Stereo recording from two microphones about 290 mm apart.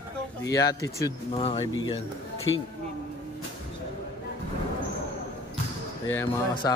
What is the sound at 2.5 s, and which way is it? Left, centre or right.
Speech, left.